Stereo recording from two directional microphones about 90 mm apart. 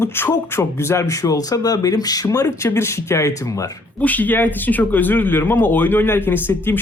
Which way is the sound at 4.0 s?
20° left (ahead or behind).